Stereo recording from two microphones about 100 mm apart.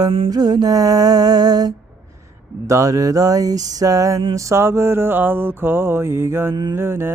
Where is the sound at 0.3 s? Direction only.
40° right (ahead or behind); by 6.5 s 25° right (ahead or behind).